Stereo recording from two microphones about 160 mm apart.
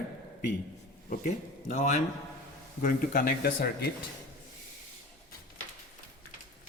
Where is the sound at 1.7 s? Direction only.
50° left (ahead or behind); by 3.8 s 80° left.